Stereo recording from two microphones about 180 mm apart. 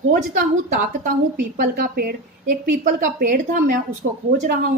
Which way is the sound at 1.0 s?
50° right (ahead or behind).